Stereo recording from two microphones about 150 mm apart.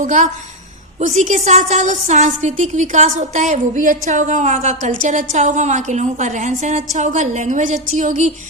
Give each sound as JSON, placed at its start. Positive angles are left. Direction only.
{"t": 0.0, "sound": "a woman's voice", "side_deg": -55}